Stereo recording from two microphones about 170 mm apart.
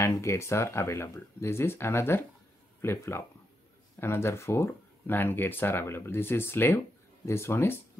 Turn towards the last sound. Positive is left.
turn(degrees=15)  # may be behind; listen again after turning